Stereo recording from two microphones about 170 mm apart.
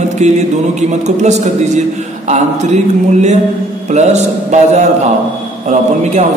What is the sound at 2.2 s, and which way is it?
Mantra, 45° right (ahead or behind).